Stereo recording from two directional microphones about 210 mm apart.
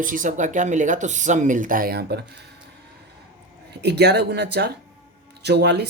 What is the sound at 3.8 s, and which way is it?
Speech, 50° right (ahead or behind).